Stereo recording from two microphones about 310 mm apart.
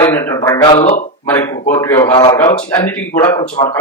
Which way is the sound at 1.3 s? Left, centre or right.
Centre.